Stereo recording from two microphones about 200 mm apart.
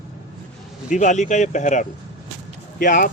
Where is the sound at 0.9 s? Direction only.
40° left (ahead or behind).